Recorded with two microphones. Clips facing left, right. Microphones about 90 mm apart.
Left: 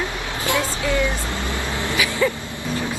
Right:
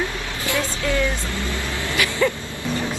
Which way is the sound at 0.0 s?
20° left (ahead or behind).